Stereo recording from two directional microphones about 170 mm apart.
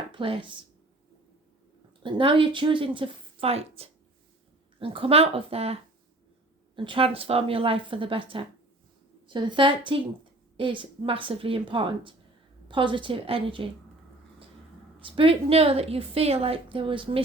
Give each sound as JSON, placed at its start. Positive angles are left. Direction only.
{"t": 0.1, "sound": "speech", "side_deg": -30}
{"t": 2.0, "sound": "a woman's voice", "side_deg": -30}
{"t": 15.0, "sound": "a woman's voice", "side_deg": -30}